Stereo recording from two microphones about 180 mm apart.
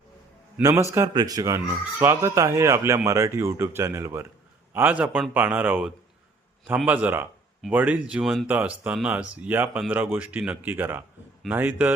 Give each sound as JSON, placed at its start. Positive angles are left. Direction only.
{"t": 0.6, "sound": "speech", "side_deg": -15}